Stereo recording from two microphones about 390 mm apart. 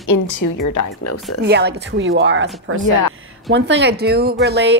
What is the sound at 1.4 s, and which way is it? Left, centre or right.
A woman's voice, right.